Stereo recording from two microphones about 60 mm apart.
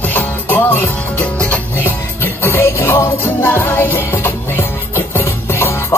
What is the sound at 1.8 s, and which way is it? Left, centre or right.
Music, left.